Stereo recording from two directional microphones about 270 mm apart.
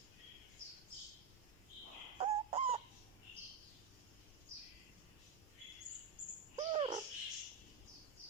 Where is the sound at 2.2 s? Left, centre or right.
Right.